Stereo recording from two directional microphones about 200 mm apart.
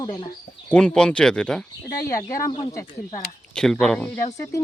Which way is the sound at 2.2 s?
15° left (ahead or behind).